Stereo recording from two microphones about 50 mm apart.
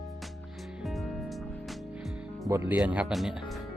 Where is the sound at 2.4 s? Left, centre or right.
Right.